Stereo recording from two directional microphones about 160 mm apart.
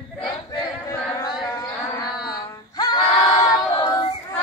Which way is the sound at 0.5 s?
25° left (ahead or behind).